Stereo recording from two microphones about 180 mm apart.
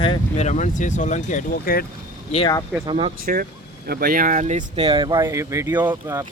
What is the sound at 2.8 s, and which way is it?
Speech, 30° right (ahead or behind).